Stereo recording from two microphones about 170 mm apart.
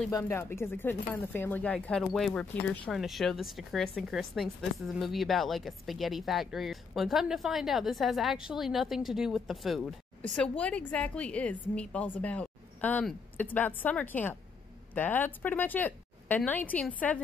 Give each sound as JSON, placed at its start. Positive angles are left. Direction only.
{"t": 0.1, "sound": "speech", "side_deg": 15}